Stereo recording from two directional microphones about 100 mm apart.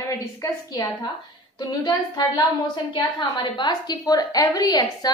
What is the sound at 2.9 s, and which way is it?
A woman's voice, 50° left (ahead or behind).